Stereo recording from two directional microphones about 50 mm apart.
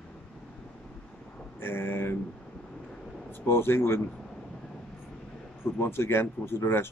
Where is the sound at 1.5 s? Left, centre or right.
Left.